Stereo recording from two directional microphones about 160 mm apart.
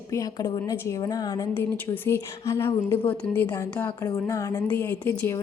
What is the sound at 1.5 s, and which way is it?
A woman's voice, 10° left (ahead or behind).